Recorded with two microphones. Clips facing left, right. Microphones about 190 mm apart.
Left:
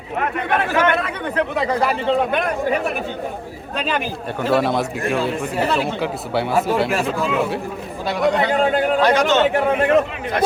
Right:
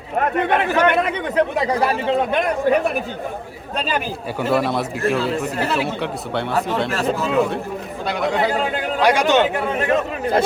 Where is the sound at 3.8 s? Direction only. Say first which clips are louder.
Left 1 dB; 5° right (ahead or behind).